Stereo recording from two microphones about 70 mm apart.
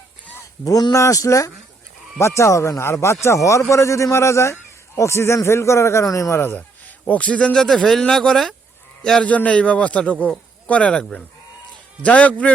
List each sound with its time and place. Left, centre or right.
0.6 s speech: left
1.0 s speech: left
6.3 s speech: left
7.1 s speech: centre
9.2 s a man's voice: centre